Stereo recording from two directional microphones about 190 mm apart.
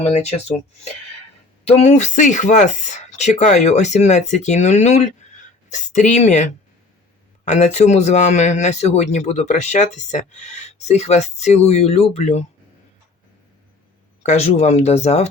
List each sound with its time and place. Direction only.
0.0 s speech: 35° left (ahead or behind)
1.6 s speech: 35° left (ahead or behind)
14.2 s speech: 35° left (ahead or behind)